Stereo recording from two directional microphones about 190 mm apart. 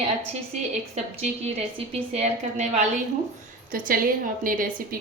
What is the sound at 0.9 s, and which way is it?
A woman's voice, 35° right (ahead or behind).